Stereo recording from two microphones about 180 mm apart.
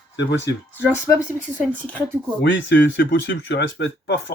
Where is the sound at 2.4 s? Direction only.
80° left.